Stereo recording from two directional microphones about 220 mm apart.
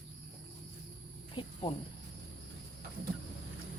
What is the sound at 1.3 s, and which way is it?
Cricket, 20° left (ahead or behind).